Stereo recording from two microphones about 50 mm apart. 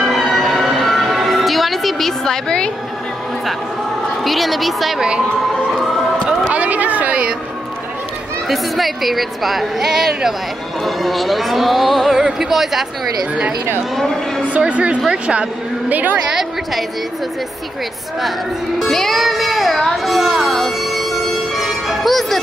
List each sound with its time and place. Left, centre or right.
0.0 s music: centre
4.2 s a woman's voice: centre
6.5 s a sound: right
8.5 s a woman's voice: centre
10.8 s a woman's voice: centre
13.9 s a man's voice: centre
14.7 s a woman's voice: right
15.9 s a woman's voice: right
16.3 s a woman's voice: centre
18.8 s music: centre